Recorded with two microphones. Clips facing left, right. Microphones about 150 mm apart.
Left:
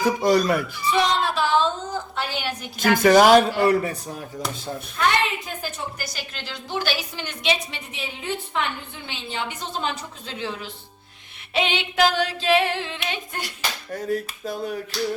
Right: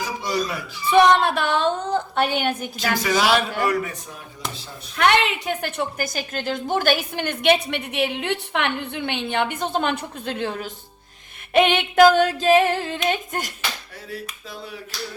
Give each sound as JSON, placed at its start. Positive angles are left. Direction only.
{"t": 0.0, "sound": "finger snapping", "side_deg": 55}
{"t": 0.9, "sound": "a woman's voice", "side_deg": -55}
{"t": 2.7, "sound": "finger snapping", "side_deg": 50}
{"t": 3.6, "sound": "a man's voice", "side_deg": 30}
{"t": 4.9, "sound": "a woman's voice", "side_deg": -75}
{"t": 11.5, "sound": "female singing", "side_deg": -55}
{"t": 13.6, "sound": "finger snapping", "side_deg": 45}